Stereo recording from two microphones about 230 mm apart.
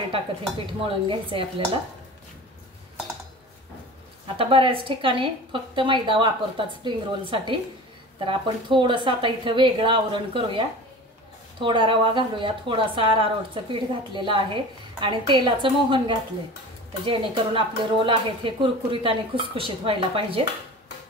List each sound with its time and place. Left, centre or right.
0.8 s speech: right
4.4 s speech: right
11.6 s speech: right